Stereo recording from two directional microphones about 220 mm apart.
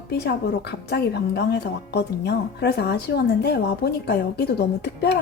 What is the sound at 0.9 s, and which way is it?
A woman's voice, 50° left (ahead or behind).